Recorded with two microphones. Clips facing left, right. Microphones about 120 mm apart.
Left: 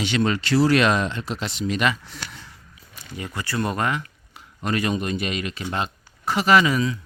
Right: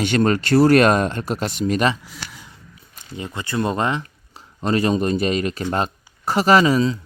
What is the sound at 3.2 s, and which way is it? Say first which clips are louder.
Speech: right 3 dB; 25° right (ahead or behind).